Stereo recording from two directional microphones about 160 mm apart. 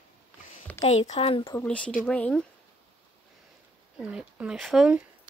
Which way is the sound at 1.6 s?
10° left (ahead or behind).